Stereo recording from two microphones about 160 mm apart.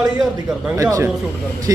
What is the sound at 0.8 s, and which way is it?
Speech, 20° right (ahead or behind).